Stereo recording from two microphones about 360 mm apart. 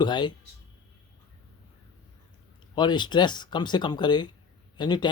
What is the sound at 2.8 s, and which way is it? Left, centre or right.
A man's voice, centre.